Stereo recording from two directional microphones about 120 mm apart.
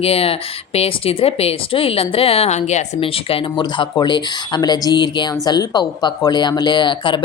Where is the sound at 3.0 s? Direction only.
50° left (ahead or behind).